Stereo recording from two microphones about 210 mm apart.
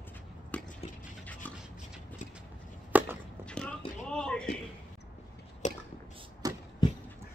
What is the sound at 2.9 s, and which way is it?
Chopping, 5° right (ahead or behind).